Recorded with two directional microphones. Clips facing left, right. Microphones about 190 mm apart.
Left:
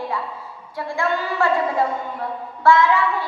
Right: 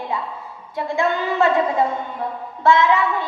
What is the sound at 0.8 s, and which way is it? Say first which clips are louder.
Speech: right 2 dB; 20° right (ahead or behind).